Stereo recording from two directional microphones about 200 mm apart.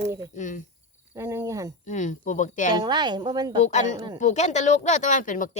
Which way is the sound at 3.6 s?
35° left (ahead or behind).